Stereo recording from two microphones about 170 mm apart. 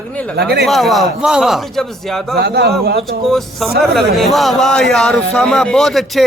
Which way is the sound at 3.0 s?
Centre (ahead or behind).